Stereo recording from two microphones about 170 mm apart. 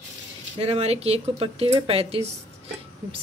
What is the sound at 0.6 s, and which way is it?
Speech, 35° right (ahead or behind).